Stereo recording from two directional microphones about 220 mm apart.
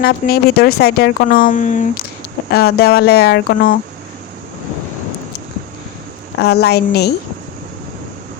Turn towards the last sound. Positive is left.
turn(degrees=45)  # may be behind; listen again after turning